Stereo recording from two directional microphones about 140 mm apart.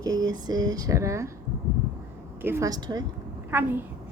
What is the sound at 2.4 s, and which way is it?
Speech, 20° right (ahead or behind).